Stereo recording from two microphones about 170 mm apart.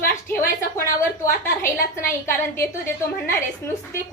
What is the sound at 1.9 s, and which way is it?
A woman's voice, 15° left (ahead or behind).